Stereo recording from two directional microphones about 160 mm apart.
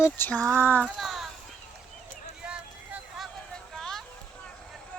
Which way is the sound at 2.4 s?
5° right (ahead or behind).